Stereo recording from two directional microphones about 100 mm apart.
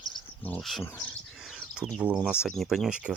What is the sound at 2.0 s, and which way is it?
Speech, 10° right (ahead or behind).